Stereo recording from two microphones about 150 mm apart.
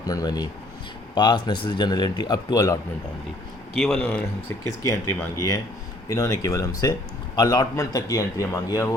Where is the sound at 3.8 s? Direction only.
Centre (ahead or behind).